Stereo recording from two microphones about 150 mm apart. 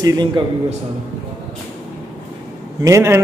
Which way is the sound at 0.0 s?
25° right (ahead or behind).